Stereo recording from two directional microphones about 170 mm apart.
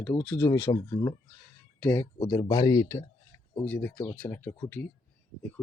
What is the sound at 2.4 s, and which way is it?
Speech, 20° left (ahead or behind).